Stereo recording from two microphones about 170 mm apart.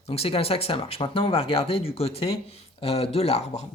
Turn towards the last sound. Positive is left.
turn(degrees=40)  # may be behind; listen again after turning